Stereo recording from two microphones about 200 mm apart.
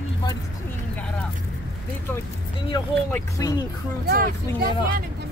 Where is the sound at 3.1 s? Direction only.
15° left (ahead or behind).